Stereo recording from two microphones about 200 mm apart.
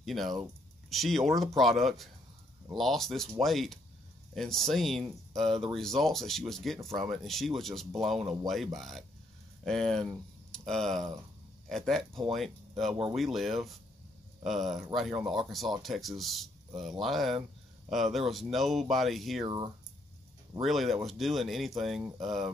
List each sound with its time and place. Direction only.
0.0 s speech: centre (ahead or behind)
19.4 s speech: 20° right (ahead or behind)
20.6 s speech: centre (ahead or behind)